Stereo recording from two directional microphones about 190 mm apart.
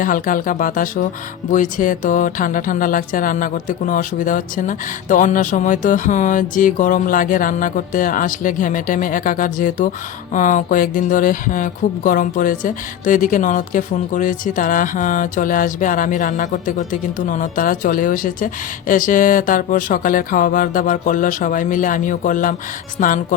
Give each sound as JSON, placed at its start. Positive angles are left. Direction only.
{"t": 0.0, "sound": "speech", "side_deg": 45}